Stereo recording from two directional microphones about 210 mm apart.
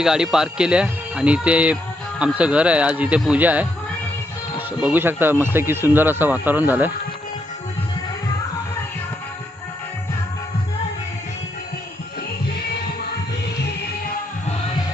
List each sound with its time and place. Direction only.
0.0 s speech: centre (ahead or behind)
4.8 s speech: 10° right (ahead or behind)